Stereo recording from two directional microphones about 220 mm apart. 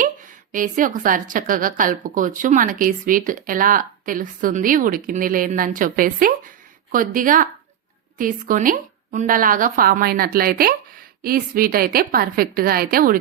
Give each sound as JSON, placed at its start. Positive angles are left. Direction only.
{"t": 0.5, "sound": "a woman's voice", "side_deg": -35}